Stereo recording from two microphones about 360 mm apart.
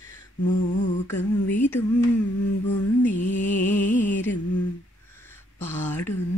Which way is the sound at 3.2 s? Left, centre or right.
Left.